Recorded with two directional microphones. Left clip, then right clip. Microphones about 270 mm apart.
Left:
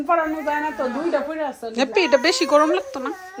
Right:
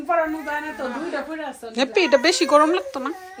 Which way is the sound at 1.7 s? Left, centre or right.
Centre.